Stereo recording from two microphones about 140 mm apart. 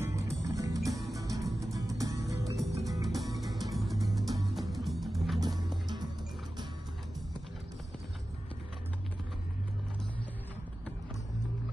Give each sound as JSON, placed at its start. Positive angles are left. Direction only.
{"t": 0.0, "sound": "music", "side_deg": -20}
{"t": 0.7, "sound": "music", "side_deg": 0}
{"t": 1.1, "sound": "music", "side_deg": -25}
{"t": 2.5, "sound": "music", "side_deg": 0}